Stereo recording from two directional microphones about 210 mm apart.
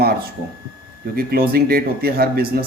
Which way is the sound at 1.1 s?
45° right (ahead or behind).